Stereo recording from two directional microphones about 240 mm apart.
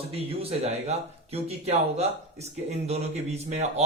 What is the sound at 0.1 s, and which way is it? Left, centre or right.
Speech, right.